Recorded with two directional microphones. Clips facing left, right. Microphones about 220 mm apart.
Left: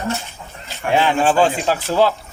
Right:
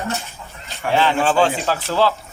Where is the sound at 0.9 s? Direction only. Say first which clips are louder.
Left 1 dB; 15° left (ahead or behind).